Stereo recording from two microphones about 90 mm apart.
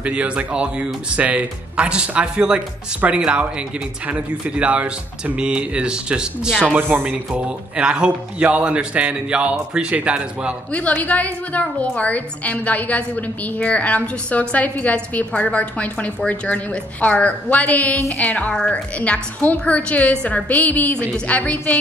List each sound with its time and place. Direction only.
0.0 s a man's voice: 15° right (ahead or behind)
6.8 s a man's voice: 20° right (ahead or behind)
10.7 s a woman's voice: 15° left (ahead or behind)